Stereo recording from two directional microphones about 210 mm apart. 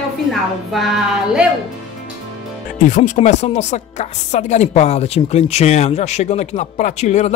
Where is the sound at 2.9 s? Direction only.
35° left (ahead or behind).